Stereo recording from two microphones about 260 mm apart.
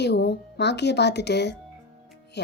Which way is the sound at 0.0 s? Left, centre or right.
Left.